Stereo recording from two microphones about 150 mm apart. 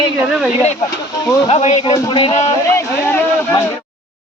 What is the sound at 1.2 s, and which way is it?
Speech, 25° left (ahead or behind).